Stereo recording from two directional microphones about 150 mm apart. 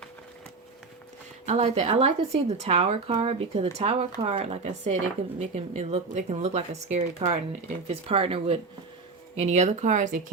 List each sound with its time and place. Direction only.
1.5 s speech: 45° right (ahead or behind)